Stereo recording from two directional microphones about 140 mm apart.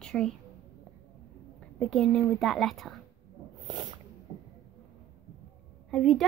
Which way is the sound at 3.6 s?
35° right (ahead or behind).